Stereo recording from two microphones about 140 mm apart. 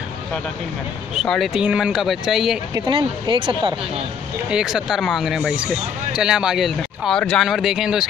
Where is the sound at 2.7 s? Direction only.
35° right (ahead or behind).